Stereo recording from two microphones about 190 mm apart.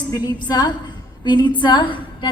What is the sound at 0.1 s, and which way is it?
A woman's voice, 20° left (ahead or behind).